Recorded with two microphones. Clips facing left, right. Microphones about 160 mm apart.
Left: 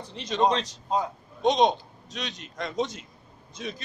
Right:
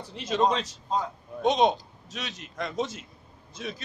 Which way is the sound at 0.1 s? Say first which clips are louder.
Left 1 dB; 5° right (ahead or behind).